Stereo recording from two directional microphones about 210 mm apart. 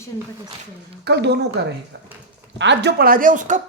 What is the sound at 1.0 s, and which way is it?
Speech, 50° right (ahead or behind).